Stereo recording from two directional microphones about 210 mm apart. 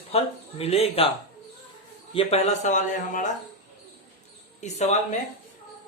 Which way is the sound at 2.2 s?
30° left (ahead or behind).